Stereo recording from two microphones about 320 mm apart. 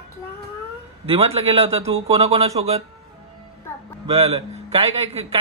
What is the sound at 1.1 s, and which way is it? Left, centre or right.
A man's voice, centre.